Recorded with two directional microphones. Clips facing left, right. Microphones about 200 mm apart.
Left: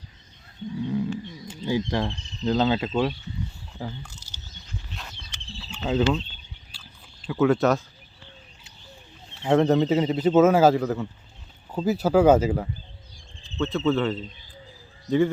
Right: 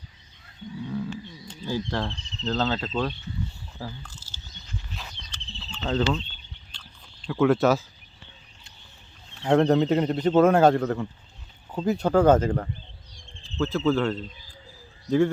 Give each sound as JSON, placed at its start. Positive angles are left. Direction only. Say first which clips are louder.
{"t": 0.9, "sound": "cricket", "louder": "left 4 dB", "side_deg": 15}
{"t": 3.8, "sound": "speech", "louder": "left 3 dB", "side_deg": 15}
{"t": 4.9, "sound": "wild animals", "louder": "even", "side_deg": 0}
{"t": 5.5, "sound": "cricket", "louder": "left 2 dB", "side_deg": 10}
{"t": 6.7, "sound": "a sound", "louder": "left 1 dB", "side_deg": 5}
{"t": 9.4, "sound": "a man's voice", "louder": "even", "side_deg": 0}